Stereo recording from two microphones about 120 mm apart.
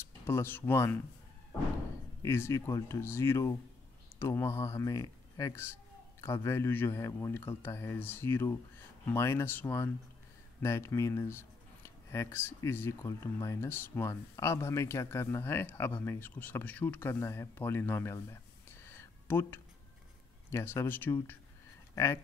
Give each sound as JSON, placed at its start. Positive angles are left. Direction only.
{"t": 0.0, "sound": "speech", "side_deg": 20}
{"t": 2.2, "sound": "speech", "side_deg": 20}
{"t": 18.9, "sound": "a sound", "side_deg": 20}
{"t": 20.5, "sound": "speech", "side_deg": 20}